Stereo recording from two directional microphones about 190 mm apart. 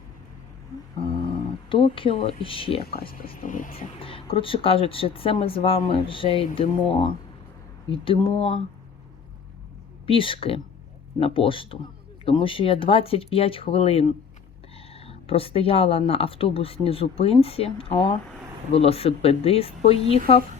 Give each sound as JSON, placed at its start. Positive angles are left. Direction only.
{"t": 1.7, "sound": "speech", "side_deg": 30}
{"t": 3.3, "sound": "speech", "side_deg": 45}
{"t": 4.0, "sound": "speech", "side_deg": 30}
{"t": 10.1, "sound": "speech", "side_deg": 30}